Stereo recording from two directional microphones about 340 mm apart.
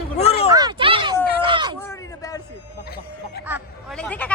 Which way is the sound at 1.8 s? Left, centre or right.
Centre.